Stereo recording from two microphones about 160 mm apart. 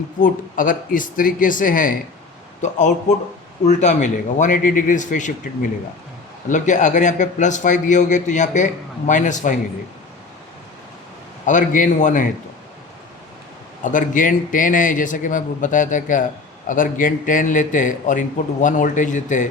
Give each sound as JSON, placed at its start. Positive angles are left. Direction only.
{"t": 0.2, "sound": "a man's voice", "side_deg": 60}
{"t": 6.5, "sound": "a man's voice", "side_deg": 50}
{"t": 11.4, "sound": "a man's voice", "side_deg": 55}
{"t": 13.8, "sound": "a man's voice", "side_deg": 55}